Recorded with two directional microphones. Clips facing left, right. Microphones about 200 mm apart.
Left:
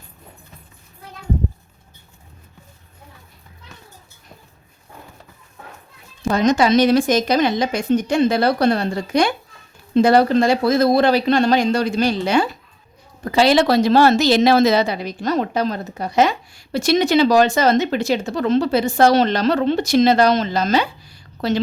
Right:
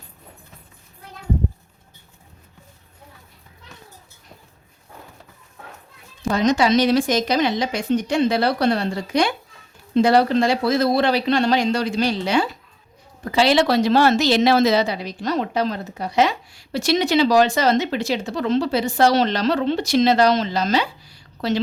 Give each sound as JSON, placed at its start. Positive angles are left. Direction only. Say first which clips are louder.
{"t": 6.2, "sound": "a woman's voice", "louder": "left 2 dB", "side_deg": 50}